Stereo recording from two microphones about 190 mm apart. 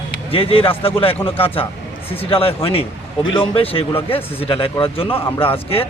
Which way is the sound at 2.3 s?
30° left (ahead or behind).